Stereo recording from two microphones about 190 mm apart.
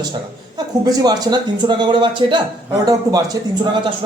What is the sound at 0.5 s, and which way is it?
Speech, 20° right (ahead or behind).